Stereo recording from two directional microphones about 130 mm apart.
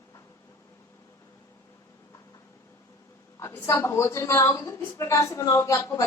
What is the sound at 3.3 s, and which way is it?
A woman's voice, 20° left (ahead or behind).